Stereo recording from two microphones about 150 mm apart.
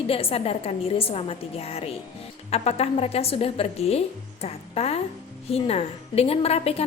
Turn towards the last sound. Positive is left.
turn(degrees=40)  # may be behind; listen again after turning